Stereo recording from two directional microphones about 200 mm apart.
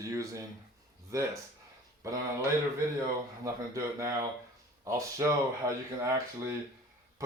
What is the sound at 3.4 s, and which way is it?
Speech, 15° right (ahead or behind).